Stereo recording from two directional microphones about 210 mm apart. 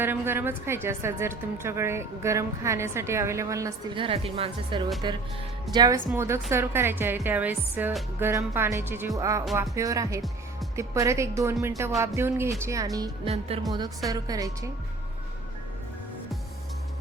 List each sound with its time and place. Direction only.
0.0 s a woman's voice: 10° right (ahead or behind)
13.5 s a woman's voice: 30° right (ahead or behind)
14.1 s speech: 15° right (ahead or behind)